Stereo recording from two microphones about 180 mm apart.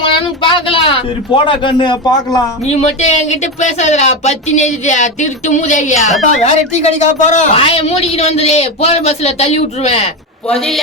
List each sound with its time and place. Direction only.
0.0 s a sound: 30° left (ahead or behind)
2.6 s a woman's voice: 40° left (ahead or behind)
10.5 s a man's voice: centre (ahead or behind)